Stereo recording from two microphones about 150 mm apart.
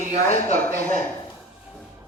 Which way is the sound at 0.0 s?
55° right (ahead or behind).